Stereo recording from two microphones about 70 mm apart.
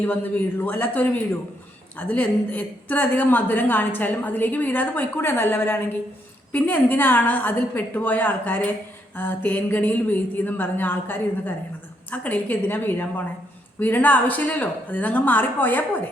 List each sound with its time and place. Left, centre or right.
0.0 s a woman's voice: left